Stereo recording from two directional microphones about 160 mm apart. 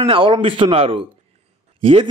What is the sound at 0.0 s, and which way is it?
A man's voice, 35° right (ahead or behind).